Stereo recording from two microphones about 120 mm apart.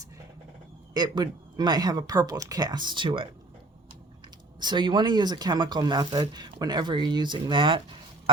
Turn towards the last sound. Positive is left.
turn(degrees=-45)  # may be behind; listen again after turning